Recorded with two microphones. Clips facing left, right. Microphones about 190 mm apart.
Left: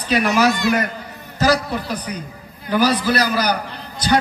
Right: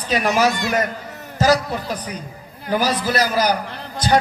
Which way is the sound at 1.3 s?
45° right (ahead or behind).